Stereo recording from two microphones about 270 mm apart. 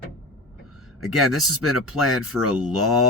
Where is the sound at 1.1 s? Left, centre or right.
Centre.